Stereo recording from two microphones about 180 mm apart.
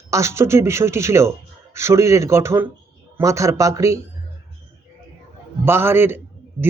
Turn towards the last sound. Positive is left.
turn(degrees=-10)  # may be behind; listen again after turning